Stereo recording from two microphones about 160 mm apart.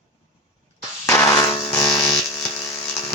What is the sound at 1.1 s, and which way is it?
Music, 20° left (ahead or behind).